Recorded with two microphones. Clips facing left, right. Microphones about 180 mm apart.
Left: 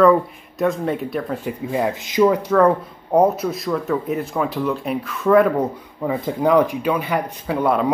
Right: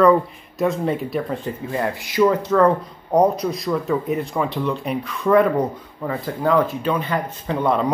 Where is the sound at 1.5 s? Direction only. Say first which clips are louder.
Left 2 dB; 15° left (ahead or behind).